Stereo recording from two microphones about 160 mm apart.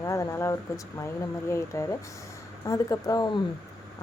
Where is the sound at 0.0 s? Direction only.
20° left (ahead or behind).